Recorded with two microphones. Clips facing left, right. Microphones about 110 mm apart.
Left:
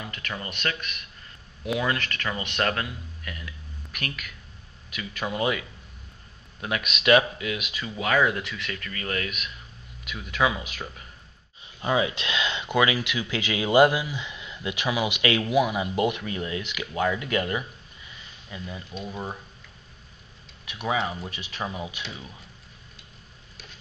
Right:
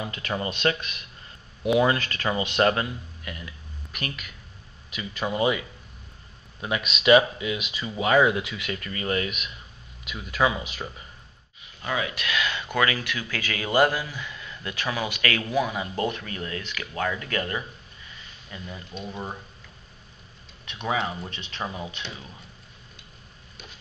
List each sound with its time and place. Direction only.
0.0 s speech: 25° right (ahead or behind); by 5.6 s 5° right (ahead or behind)
6.6 s speech: centre (ahead or behind)
11.8 s speech: 25° left (ahead or behind)
18.5 s speech: 5° left (ahead or behind)
20.6 s speech: 5° left (ahead or behind)